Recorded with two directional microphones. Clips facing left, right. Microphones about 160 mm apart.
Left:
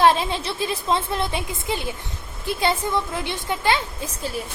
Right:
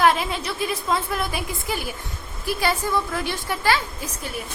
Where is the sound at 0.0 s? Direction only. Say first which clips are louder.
Left 2 dB; 30° left (ahead or behind).